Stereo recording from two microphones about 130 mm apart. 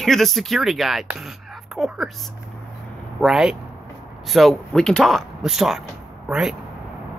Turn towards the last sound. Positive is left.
turn(degrees=-5)  # may be behind; listen again after turning